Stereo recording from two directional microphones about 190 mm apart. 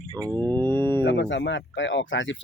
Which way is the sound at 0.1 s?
15° right (ahead or behind).